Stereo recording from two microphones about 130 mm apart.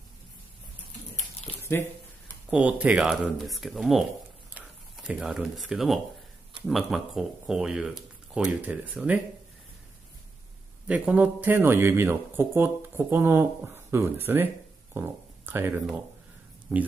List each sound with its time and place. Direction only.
2.5 s speech: 10° right (ahead or behind)
10.9 s speech: 10° right (ahead or behind)